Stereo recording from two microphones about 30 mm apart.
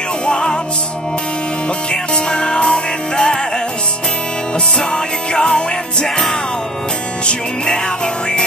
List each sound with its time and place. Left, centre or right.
0.3 s music: left
1.9 s music: left
5.3 s music: left